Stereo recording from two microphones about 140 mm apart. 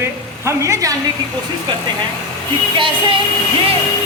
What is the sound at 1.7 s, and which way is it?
Child singing, 35° right (ahead or behind).